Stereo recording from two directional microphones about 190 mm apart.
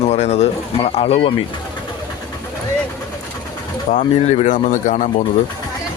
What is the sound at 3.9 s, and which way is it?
Speech, 40° left (ahead or behind).